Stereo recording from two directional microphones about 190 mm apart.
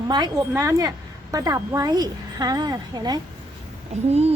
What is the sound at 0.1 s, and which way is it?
A woman's voice, 20° right (ahead or behind).